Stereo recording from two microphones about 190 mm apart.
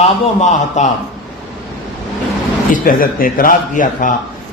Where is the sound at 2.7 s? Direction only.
45° left (ahead or behind).